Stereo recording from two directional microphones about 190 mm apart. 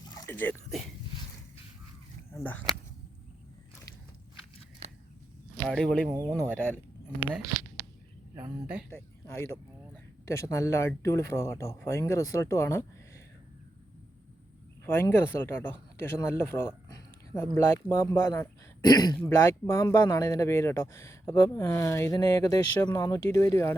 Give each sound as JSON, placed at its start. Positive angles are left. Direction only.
{"t": 0.3, "sound": "speech", "side_deg": 10}
{"t": 2.3, "sound": "speech", "side_deg": 10}
{"t": 4.8, "sound": "a sound", "side_deg": -35}
{"t": 5.6, "sound": "speech", "side_deg": 5}
{"t": 6.1, "sound": "speech", "side_deg": -20}
{"t": 8.6, "sound": "speech", "side_deg": -5}
{"t": 8.9, "sound": "speech", "side_deg": 15}
{"t": 14.8, "sound": "speech", "side_deg": 10}